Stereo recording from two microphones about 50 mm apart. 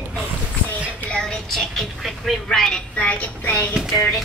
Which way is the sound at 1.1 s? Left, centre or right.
Centre.